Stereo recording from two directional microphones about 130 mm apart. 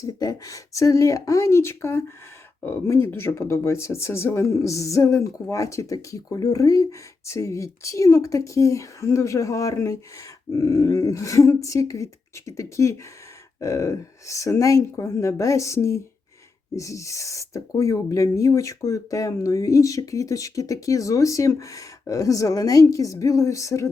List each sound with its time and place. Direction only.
0.0 s speech: 30° left (ahead or behind)